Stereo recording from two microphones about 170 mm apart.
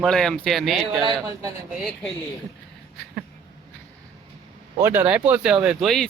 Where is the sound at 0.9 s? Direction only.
25° right (ahead or behind).